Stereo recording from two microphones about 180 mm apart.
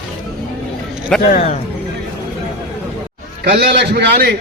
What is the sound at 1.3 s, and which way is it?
Speech, 45° left (ahead or behind).